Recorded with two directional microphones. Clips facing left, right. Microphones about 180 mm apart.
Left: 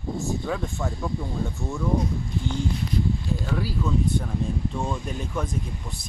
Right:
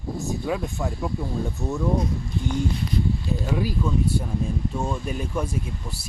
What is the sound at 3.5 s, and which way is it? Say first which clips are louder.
Speech: right 2 dB; 15° right (ahead or behind).